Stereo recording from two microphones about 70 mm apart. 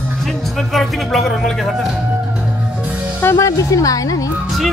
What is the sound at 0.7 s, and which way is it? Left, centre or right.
Speech, centre.